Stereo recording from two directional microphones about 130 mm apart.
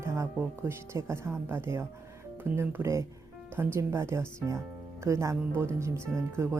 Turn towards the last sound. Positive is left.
turn(degrees=-20)  # may be behind; listen again after turning